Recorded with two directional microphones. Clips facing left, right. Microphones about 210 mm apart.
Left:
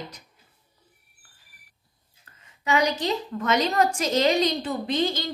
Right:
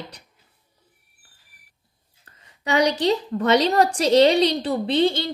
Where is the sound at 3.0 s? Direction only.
35° right (ahead or behind).